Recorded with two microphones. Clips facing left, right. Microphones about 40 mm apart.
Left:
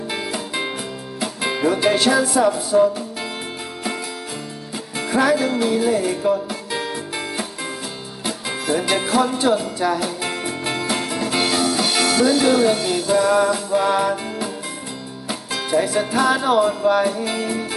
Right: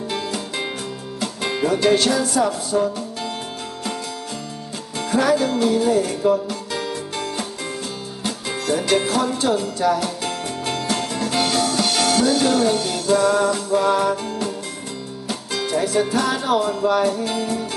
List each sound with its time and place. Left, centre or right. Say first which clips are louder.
0.1 s music: left 1 dB; centre
4.9 s music: even; centre